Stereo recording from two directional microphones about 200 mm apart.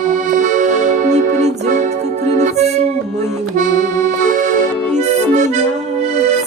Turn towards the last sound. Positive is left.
turn(degrees=-35)  # may be behind; listen again after turning